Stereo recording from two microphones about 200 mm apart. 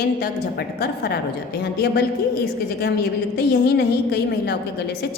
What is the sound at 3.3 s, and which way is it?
A woman's voice, 55° left (ahead or behind).